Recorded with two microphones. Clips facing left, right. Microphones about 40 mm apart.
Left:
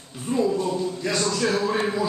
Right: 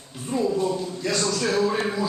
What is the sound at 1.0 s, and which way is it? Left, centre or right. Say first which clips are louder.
Speech: right 1 dB; left.